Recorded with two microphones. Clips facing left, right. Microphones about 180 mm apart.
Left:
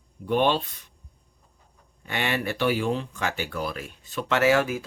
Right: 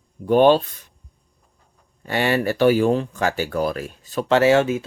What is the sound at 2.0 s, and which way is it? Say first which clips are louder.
Speech: right 7 dB; 40° right (ahead or behind).